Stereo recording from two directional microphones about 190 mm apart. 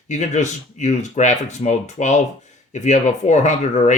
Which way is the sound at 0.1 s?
40° left (ahead or behind).